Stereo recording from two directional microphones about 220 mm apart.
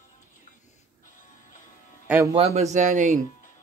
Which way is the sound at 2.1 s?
15° right (ahead or behind).